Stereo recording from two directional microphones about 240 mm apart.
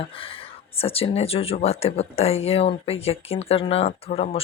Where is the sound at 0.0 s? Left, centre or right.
Left.